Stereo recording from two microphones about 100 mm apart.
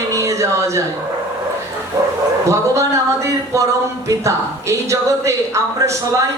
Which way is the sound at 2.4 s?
30° right (ahead or behind).